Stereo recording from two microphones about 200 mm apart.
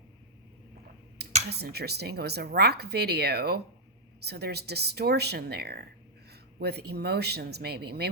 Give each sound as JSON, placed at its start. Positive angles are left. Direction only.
{"t": 1.5, "sound": "speech", "side_deg": -55}